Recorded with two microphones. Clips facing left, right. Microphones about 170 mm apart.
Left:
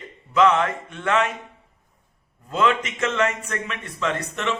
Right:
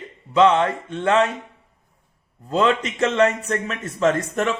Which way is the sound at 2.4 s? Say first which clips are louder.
Right 2 dB; 35° right (ahead or behind).